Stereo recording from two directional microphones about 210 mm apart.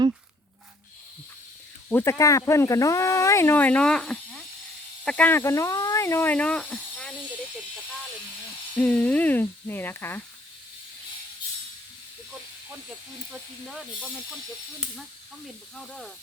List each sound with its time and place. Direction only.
1.9 s speech: 10° left (ahead or behind)
8.8 s speech: 5° left (ahead or behind)